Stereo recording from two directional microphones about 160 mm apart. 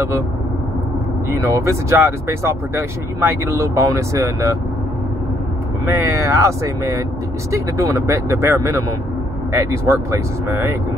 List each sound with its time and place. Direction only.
1.4 s speech: 20° right (ahead or behind)
5.9 s speech: 15° right (ahead or behind)